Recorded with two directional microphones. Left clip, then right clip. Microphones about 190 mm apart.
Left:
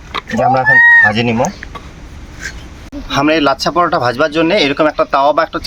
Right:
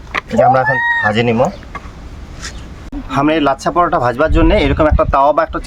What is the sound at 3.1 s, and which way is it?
Speech, centre (ahead or behind).